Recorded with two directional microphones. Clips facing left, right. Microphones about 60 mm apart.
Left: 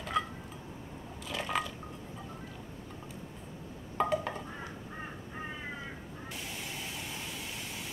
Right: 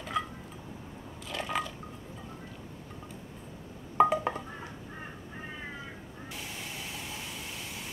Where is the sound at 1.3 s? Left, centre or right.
Centre.